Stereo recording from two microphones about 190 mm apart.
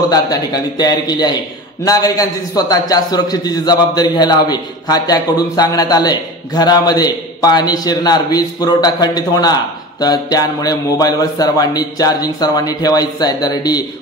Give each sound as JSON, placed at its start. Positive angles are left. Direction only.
{"t": 0.1, "sound": "a man's voice", "side_deg": 20}